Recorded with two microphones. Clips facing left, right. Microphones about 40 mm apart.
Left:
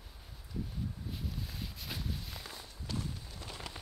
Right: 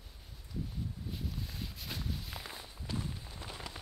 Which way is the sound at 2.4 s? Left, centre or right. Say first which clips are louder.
Right 1 dB; centre.